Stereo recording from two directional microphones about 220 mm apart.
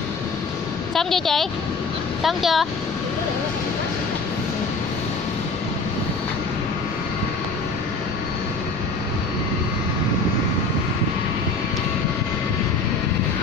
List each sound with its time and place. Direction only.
0.9 s a woman's voice: centre (ahead or behind)